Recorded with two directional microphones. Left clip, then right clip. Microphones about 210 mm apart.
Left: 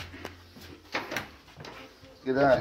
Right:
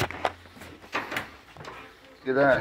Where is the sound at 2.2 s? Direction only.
10° left (ahead or behind).